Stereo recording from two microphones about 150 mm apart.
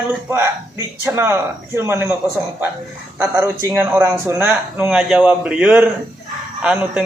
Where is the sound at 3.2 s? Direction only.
15° right (ahead or behind).